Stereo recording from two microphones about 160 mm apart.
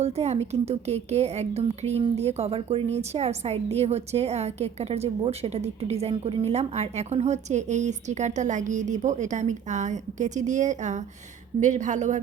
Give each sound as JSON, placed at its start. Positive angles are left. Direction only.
{"t": 0.0, "sound": "a woman's voice", "side_deg": -40}